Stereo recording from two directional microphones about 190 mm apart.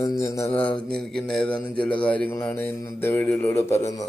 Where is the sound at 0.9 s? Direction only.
5° left (ahead or behind).